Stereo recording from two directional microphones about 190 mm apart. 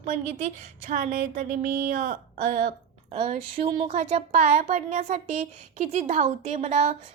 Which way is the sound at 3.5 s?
30° right (ahead or behind).